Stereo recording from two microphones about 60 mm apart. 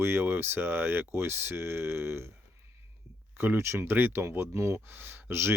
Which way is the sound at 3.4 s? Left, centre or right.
Right.